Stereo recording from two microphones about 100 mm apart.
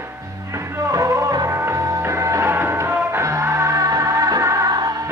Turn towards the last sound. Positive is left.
turn(degrees=-40)  # may be behind; listen again after turning